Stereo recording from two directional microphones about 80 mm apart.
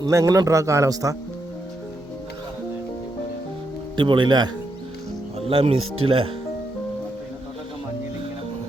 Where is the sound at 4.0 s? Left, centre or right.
Right.